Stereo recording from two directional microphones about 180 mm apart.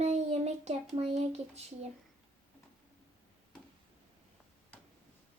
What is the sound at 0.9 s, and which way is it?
Speech, 35° right (ahead or behind).